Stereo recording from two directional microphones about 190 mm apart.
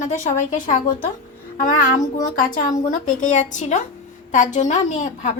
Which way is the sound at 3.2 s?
40° left (ahead or behind).